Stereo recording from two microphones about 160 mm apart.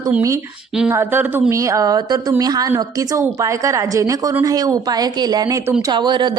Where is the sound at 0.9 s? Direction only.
15° right (ahead or behind).